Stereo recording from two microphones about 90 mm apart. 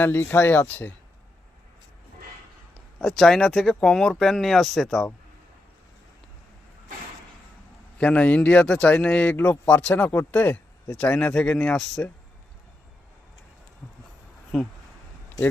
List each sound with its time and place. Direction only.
0.0 s speech: 25° left (ahead or behind)
3.0 s speech: 5° left (ahead or behind)
7.9 s speech: 15° left (ahead or behind)
14.5 s speech: 5° left (ahead or behind)